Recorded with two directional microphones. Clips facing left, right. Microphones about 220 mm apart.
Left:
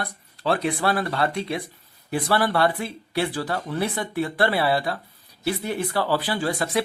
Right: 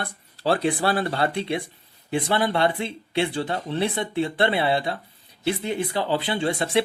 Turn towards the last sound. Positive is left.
turn(degrees=-25)  # may be behind; listen again after turning